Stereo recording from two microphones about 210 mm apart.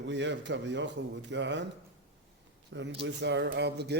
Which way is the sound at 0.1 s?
60° right (ahead or behind).